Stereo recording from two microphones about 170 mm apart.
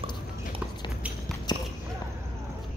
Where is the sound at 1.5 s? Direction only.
25° left (ahead or behind).